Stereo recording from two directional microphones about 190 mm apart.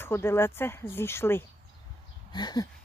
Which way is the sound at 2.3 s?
20° left (ahead or behind).